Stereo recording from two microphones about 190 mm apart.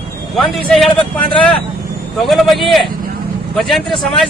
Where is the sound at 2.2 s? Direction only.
Centre (ahead or behind).